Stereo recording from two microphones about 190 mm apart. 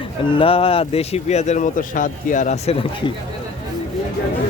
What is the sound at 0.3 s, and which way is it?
Speech, 30° left (ahead or behind).